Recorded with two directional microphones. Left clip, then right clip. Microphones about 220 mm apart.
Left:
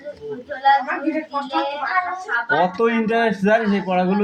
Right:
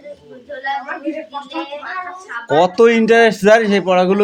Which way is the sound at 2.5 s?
50° right (ahead or behind).